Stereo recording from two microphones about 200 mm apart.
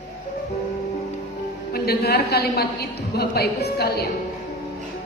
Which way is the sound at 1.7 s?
50° left (ahead or behind).